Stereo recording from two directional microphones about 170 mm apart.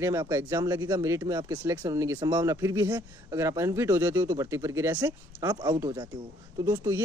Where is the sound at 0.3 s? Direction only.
15° right (ahead or behind).